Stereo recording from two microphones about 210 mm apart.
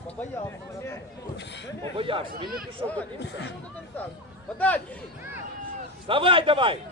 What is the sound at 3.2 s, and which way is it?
Speech, 55° left (ahead or behind).